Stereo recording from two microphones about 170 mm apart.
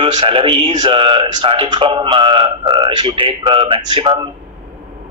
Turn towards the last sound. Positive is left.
turn(degrees=-25)  # may be behind; listen again after turning